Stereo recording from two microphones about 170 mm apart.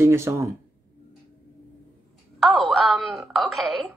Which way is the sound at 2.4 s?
Centre (ahead or behind).